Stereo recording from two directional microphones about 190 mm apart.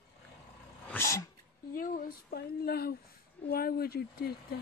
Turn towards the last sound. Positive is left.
turn(degrees=55)  # may be behind; listen again after turning